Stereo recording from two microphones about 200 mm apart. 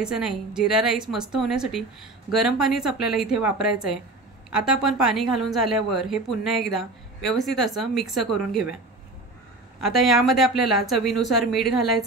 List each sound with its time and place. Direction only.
0.0 s a woman's voice: 5° right (ahead or behind)
9.8 s a woman's voice: centre (ahead or behind)